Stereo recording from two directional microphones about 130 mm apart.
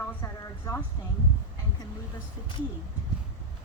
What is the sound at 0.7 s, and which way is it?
Speech, 25° left (ahead or behind).